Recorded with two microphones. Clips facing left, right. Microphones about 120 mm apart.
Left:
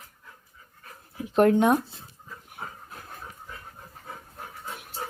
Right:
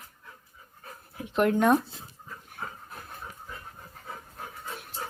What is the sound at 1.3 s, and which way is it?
Speech, 40° left (ahead or behind).